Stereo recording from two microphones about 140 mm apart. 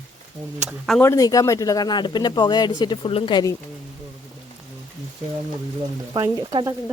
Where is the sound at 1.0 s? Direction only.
25° left (ahead or behind).